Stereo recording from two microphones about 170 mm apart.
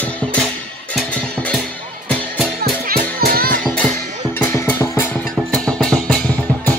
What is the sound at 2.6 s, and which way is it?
Music, 60° right (ahead or behind).